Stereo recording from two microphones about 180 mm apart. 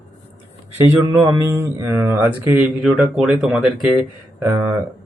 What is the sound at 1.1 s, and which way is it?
Speech, 15° right (ahead or behind).